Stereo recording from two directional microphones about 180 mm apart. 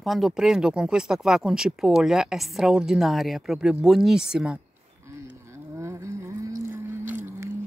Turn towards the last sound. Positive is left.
turn(degrees=-10)  # may be behind; listen again after turning